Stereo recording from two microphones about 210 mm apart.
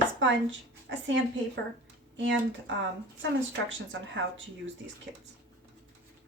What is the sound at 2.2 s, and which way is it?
Speech, 60° right (ahead or behind).